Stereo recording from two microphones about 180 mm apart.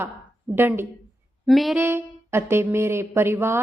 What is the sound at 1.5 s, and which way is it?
Speech, centre (ahead or behind).